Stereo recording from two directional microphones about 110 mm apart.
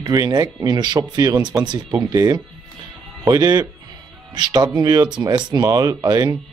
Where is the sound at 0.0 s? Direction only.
35° right (ahead or behind).